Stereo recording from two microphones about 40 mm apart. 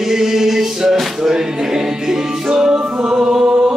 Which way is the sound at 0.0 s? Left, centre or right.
Centre.